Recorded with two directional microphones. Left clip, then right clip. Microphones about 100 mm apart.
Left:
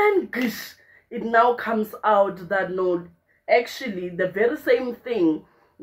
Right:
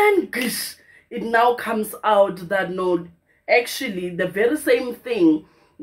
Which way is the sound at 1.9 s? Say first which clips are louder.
Right 1 dB; centre (ahead or behind).